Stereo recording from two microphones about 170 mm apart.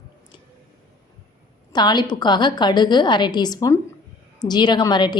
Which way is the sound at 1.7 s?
25° left (ahead or behind).